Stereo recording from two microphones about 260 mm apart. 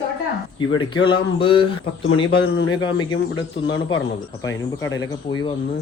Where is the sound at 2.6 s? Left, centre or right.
Left.